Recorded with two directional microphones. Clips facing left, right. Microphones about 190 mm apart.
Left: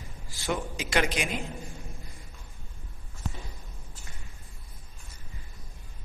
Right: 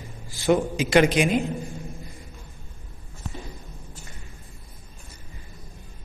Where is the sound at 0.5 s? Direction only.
20° right (ahead or behind).